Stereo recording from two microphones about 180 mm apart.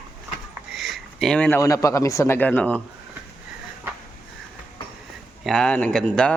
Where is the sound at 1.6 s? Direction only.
20° left (ahead or behind).